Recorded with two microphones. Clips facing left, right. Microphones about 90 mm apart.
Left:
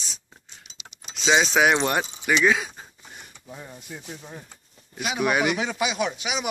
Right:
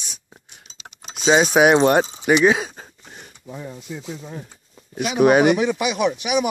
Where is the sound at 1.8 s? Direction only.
35° right (ahead or behind).